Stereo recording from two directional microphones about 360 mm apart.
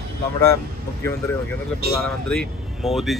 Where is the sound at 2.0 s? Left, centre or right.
Centre.